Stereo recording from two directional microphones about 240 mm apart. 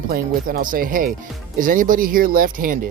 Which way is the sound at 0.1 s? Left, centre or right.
Right.